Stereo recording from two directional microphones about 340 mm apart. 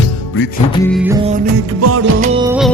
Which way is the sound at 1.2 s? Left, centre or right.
Right.